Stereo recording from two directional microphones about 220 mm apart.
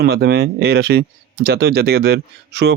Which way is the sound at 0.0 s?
50° right (ahead or behind).